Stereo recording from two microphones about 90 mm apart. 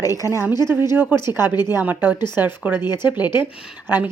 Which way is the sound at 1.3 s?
20° right (ahead or behind).